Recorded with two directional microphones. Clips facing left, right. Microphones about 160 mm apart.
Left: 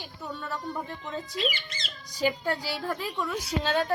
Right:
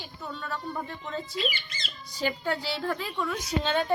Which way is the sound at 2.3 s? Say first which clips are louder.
Even; 10° left (ahead or behind).